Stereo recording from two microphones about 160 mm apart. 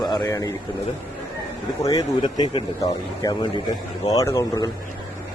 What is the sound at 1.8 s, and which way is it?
Speech, 25° left (ahead or behind).